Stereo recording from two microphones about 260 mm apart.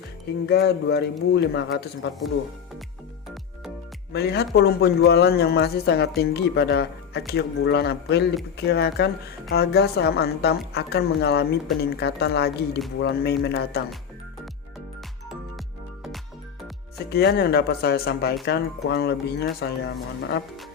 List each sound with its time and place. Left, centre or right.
0.4 s speech: left
4.1 s speech: left
17.1 s speech: left